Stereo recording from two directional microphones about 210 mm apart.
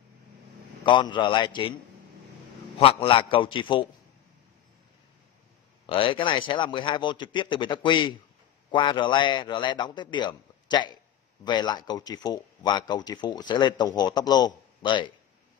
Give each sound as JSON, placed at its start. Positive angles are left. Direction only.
{"t": 0.8, "sound": "speech", "side_deg": 20}
{"t": 2.8, "sound": "speech", "side_deg": 25}
{"t": 5.9, "sound": "speech", "side_deg": 25}